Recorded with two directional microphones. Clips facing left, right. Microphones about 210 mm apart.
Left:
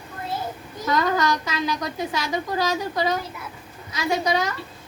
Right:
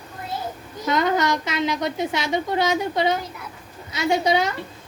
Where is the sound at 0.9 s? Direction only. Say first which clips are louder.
Right 1 dB; 20° right (ahead or behind).